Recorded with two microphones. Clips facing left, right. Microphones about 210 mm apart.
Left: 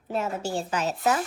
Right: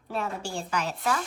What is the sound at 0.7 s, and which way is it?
Speech, 25° left (ahead or behind).